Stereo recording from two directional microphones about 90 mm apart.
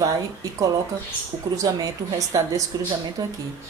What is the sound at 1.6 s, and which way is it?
A woman's voice, 40° right (ahead or behind).